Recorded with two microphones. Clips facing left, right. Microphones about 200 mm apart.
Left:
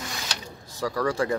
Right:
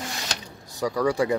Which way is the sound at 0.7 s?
15° right (ahead or behind).